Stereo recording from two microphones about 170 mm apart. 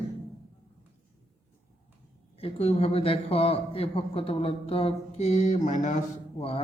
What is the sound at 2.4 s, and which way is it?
A man's voice, 35° left (ahead or behind).